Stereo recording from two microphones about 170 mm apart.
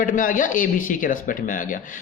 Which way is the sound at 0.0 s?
50° left (ahead or behind).